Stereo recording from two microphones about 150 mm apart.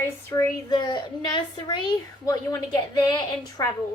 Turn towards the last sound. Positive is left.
turn(degrees=25)  # may be behind; listen again after turning